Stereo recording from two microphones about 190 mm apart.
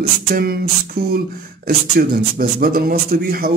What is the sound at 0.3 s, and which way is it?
A man's voice, 50° right (ahead or behind).